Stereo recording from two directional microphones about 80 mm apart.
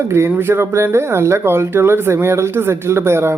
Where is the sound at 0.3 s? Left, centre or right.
Right.